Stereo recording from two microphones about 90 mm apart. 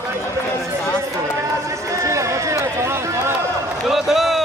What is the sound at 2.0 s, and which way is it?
Run, 35° right (ahead or behind).